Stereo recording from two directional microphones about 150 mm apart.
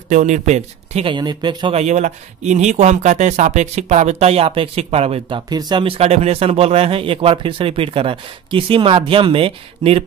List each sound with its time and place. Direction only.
0.1 s speech: 55° right (ahead or behind)
1.1 s speech: 30° right (ahead or behind)
1.8 s speech: 50° right (ahead or behind)
5.5 s speech: 30° right (ahead or behind)